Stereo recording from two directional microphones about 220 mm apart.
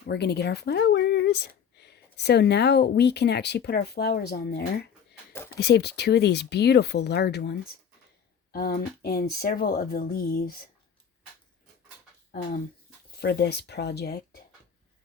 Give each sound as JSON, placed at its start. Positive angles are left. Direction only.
{"t": 0.1, "sound": "speech", "side_deg": 50}
{"t": 5.3, "sound": "a sound", "side_deg": 10}
{"t": 5.5, "sound": "speech", "side_deg": 50}
{"t": 12.3, "sound": "speech", "side_deg": 40}